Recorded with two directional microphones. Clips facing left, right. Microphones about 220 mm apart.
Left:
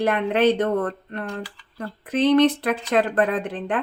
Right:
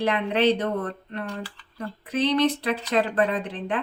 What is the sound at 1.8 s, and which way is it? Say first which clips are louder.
Speech: left 3 dB; 50° left (ahead or behind).